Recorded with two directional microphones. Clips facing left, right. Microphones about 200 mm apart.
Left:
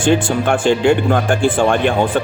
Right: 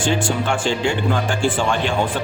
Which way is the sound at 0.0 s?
55° left (ahead or behind).